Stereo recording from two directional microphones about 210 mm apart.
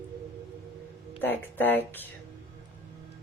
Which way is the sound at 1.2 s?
10° left (ahead or behind).